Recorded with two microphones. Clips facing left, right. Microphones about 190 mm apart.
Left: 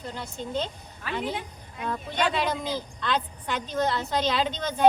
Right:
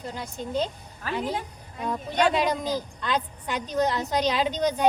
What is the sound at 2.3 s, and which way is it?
A woman's voice, 10° right (ahead or behind).